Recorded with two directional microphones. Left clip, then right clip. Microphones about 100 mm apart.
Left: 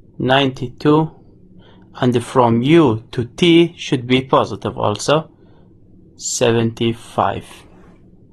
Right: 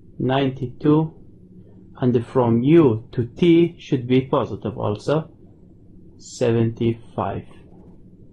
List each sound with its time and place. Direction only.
0.5 s speech: 20° left (ahead or behind)
6.3 s speech: 20° left (ahead or behind)